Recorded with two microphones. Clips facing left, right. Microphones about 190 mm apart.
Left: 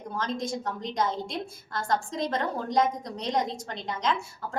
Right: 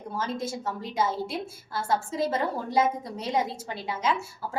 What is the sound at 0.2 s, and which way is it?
A woman's voice, 5° right (ahead or behind).